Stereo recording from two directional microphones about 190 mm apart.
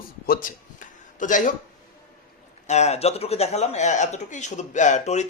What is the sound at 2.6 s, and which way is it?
Speech, 35° left (ahead or behind).